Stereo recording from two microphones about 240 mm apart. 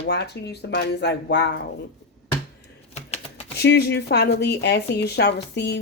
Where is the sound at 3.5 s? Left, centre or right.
Left.